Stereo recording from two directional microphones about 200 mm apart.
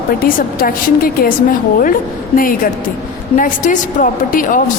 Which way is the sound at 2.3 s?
45° left (ahead or behind).